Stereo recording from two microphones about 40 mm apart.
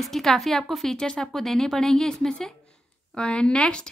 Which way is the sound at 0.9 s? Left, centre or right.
Centre.